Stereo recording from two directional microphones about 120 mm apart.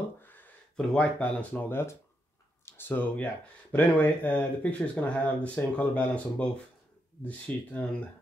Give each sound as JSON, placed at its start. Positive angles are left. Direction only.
{"t": 0.2, "sound": "speech", "side_deg": 15}